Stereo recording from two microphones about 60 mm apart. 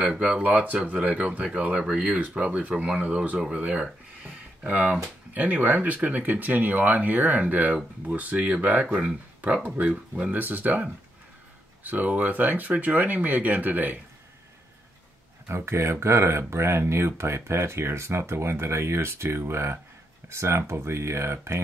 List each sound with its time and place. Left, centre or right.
0.2 s speech: right
15.4 s speech: right